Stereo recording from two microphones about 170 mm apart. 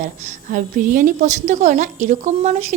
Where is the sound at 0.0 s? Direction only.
45° right (ahead or behind).